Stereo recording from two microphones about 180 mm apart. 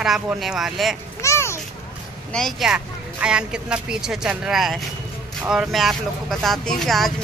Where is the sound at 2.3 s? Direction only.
Centre (ahead or behind).